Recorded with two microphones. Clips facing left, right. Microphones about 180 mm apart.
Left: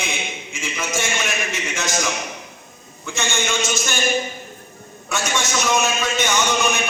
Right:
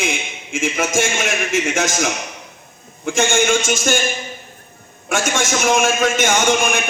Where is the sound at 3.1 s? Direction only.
50° right (ahead or behind).